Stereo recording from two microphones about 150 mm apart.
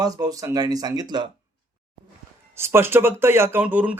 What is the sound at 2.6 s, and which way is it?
Speech, 15° right (ahead or behind).